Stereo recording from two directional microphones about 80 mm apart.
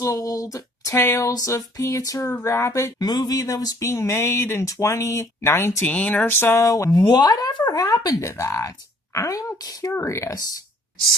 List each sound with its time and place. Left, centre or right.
0.0 s a sound: left
1.3 s speech: left
3.0 s speech: left
3.8 s speech: left
5.9 s a sound: centre
7.1 s speech: left
7.7 s speech: left
9.9 s speech: left